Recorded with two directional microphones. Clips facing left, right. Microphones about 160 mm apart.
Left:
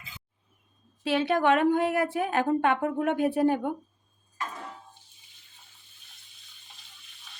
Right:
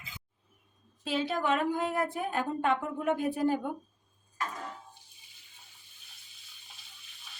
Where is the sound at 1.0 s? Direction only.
70° left (ahead or behind).